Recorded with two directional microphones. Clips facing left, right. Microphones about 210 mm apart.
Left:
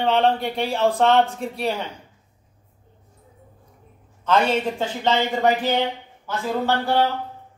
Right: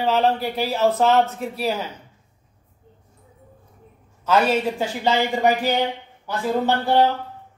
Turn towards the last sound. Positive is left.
turn(degrees=-15)  # may be behind; listen again after turning